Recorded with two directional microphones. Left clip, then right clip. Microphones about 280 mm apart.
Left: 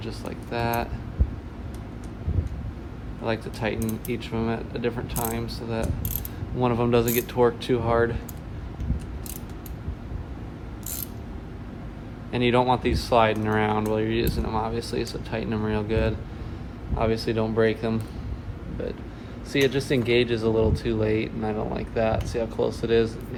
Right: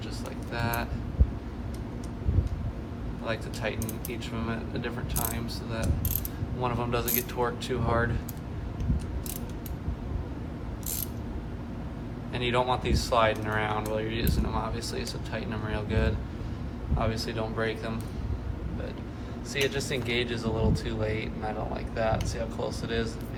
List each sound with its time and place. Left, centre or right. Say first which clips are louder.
0.5 s speech: left 5 dB; left
3.2 s speech: left 5 dB; left
12.3 s speech: left 6 dB; left
19.5 s speech: left 6 dB; left